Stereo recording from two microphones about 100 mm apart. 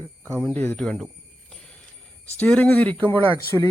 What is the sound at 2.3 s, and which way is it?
Speech, 15° left (ahead or behind).